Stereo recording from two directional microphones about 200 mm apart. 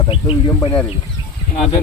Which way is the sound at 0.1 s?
25° left (ahead or behind).